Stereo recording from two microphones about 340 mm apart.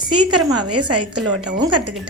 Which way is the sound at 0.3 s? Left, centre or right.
Right.